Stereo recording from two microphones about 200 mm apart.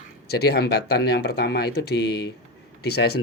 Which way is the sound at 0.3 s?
50° left (ahead or behind).